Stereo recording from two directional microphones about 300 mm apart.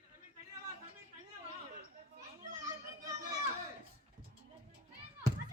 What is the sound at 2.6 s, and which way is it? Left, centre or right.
Children playing, centre.